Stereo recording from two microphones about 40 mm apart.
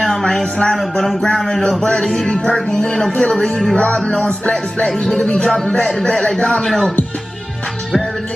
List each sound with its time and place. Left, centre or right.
0.2 s a sound: left
0.7 s speech: centre
3.2 s music: left
4.8 s music: centre
5.1 s music: left